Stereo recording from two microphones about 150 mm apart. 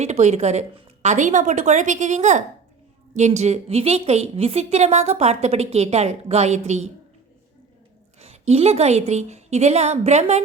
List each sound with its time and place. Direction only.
0.0 s a woman's voice: 50° right (ahead or behind)
8.2 s a woman's voice: 45° right (ahead or behind)